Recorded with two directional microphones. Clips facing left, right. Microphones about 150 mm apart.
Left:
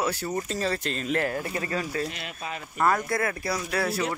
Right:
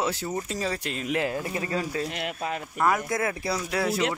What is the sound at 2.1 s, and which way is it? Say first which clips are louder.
Speech: right 5 dB; 60° right (ahead or behind).